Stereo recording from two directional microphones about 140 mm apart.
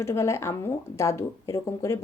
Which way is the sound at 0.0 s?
20° left (ahead or behind).